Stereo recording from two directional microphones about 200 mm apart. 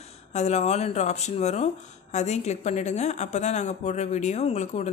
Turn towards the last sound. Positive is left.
turn(degrees=35)  # may be behind; listen again after turning